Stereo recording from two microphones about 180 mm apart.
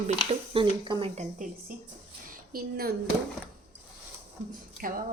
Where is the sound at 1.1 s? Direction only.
45° right (ahead or behind).